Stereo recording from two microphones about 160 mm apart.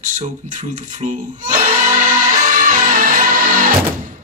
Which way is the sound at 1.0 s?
50° right (ahead or behind).